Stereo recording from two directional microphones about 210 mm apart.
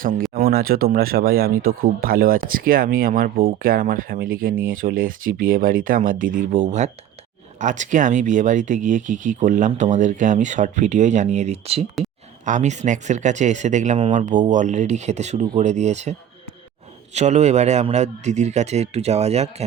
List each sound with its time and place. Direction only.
0.3 s speech: 45° right (ahead or behind)
17.2 s speech: 35° right (ahead or behind)